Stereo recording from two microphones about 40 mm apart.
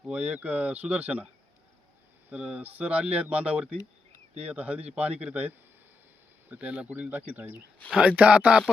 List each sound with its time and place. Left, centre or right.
0.1 s speech: right
2.3 s speech: right
6.6 s speech: right
7.1 s speech: right
8.1 s speech: right